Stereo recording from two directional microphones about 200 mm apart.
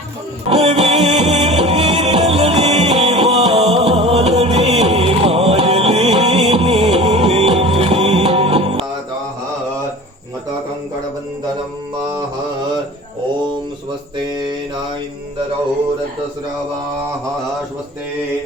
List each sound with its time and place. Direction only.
0.5 s music: 30° right (ahead or behind)
14.2 s mantra: 20° right (ahead or behind)